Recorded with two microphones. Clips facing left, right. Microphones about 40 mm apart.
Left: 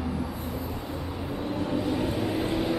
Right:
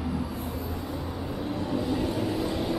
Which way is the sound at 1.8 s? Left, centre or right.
Left.